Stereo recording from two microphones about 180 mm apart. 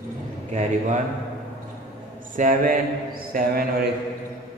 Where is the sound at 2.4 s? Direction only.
45° right (ahead or behind).